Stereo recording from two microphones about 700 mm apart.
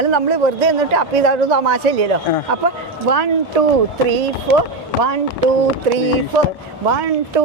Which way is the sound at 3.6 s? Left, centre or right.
Right.